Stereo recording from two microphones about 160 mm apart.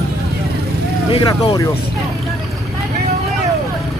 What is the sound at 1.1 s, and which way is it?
Speech, 30° left (ahead or behind).